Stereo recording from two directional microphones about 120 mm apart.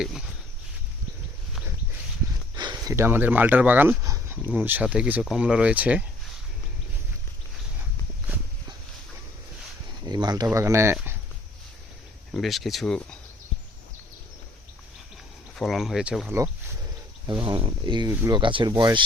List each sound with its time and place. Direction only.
2.6 s speech: 35° right (ahead or behind); by 3.9 s 15° right (ahead or behind)
4.0 s a sound: 30° right (ahead or behind)
4.5 s speech: 15° right (ahead or behind)
10.0 s a sound: 35° right (ahead or behind)
10.4 s speech: 25° right (ahead or behind)
12.3 s speech: centre (ahead or behind)
15.5 s speech: centre (ahead or behind)
17.4 s speech: 45° right (ahead or behind)